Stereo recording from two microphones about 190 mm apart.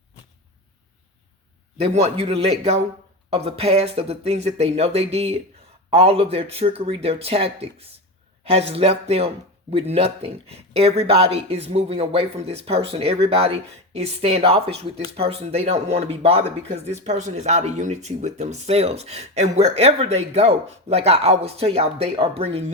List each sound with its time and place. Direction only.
1.8 s speech: 35° right (ahead or behind)